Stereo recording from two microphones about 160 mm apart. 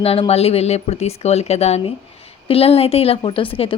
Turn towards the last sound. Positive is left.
turn(degrees=35)  # may be behind; listen again after turning